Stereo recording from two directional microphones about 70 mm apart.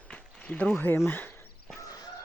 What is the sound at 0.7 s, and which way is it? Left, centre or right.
Speech, left.